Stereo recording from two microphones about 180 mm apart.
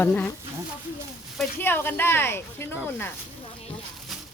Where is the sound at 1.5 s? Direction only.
10° left (ahead or behind).